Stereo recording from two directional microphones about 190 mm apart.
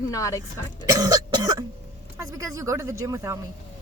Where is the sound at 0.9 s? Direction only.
20° right (ahead or behind).